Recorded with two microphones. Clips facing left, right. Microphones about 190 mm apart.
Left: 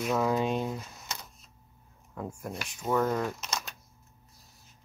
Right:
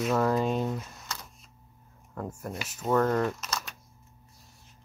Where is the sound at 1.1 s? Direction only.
20° left (ahead or behind).